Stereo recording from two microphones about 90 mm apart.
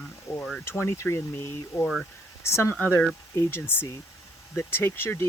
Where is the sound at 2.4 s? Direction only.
30° left (ahead or behind).